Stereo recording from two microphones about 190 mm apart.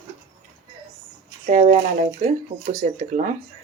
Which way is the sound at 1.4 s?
40° right (ahead or behind).